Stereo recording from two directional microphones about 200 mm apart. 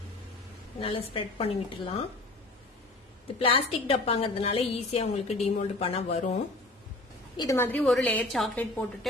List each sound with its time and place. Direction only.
0.7 s a woman's voice: 25° left (ahead or behind)
3.3 s a woman's voice: 25° left (ahead or behind)
7.3 s a woman's voice: 15° left (ahead or behind)